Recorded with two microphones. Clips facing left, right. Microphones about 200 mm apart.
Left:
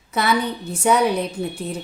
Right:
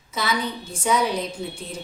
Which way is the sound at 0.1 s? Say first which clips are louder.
Left 5 dB; 60° left (ahead or behind).